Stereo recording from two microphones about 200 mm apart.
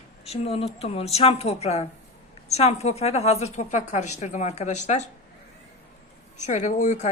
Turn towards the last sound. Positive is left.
turn(degrees=35)  # may be behind; listen again after turning